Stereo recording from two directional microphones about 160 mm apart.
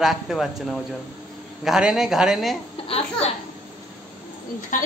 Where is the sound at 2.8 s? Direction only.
35° left (ahead or behind).